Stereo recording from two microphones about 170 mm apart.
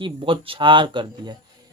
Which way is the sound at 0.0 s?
30° right (ahead or behind).